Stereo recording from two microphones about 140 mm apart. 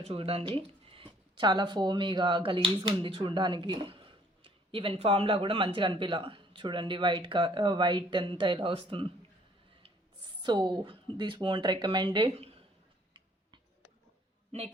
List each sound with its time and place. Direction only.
0.0 s speech: 45° right (ahead or behind)
10.4 s speech: 30° right (ahead or behind)